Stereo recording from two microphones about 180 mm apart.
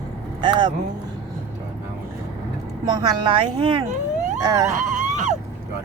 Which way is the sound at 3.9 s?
45° right (ahead or behind).